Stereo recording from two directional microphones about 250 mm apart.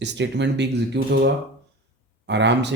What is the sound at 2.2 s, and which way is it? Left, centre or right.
Speech, right.